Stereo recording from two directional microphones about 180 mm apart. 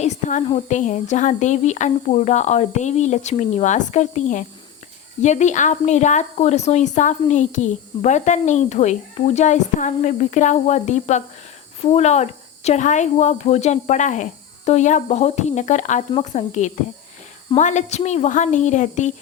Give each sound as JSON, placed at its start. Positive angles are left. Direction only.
{"t": 0.0, "sound": "a woman's voice", "side_deg": 40}